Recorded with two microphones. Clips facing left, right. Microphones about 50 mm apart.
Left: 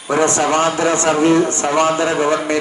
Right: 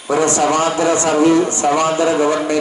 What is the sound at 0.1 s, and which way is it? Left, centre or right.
A man's voice, left.